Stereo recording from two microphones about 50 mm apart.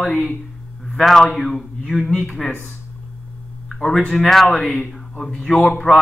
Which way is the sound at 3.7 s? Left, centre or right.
Centre.